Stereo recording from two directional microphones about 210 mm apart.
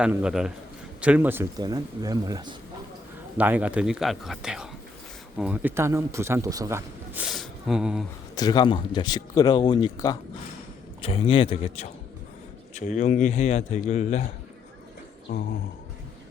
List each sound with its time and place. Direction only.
0.0 s speech: 5° right (ahead or behind); by 2.6 s 20° right (ahead or behind)
3.3 s speech: 5° right (ahead or behind)
8.4 s a man's voice: 20° left (ahead or behind)